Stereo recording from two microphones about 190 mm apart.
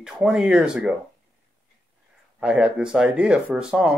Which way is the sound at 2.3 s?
5° right (ahead or behind).